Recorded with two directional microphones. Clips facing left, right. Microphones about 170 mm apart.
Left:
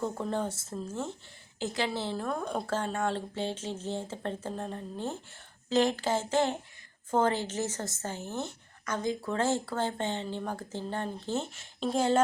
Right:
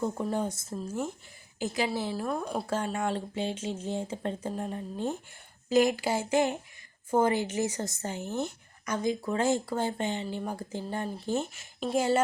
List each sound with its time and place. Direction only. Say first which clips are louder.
0.0 s a woman's voice: right 2 dB; 10° right (ahead or behind)